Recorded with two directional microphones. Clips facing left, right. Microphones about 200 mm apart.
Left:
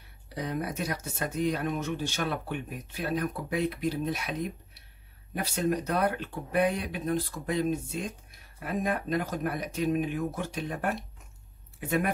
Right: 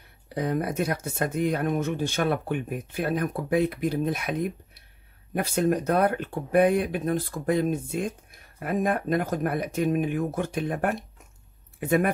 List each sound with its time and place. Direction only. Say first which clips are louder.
0.3 s speech: right 6 dB; 55° right (ahead or behind)